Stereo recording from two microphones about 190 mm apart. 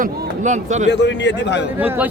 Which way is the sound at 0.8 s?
65° left (ahead or behind).